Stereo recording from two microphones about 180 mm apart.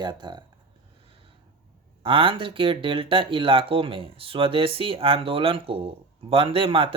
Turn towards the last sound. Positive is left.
turn(degrees=-30)  # may be behind; listen again after turning